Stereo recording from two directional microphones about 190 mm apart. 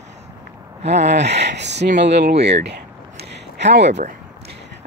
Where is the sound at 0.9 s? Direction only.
60° right (ahead or behind).